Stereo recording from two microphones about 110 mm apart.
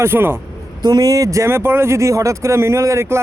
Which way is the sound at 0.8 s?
35° right (ahead or behind).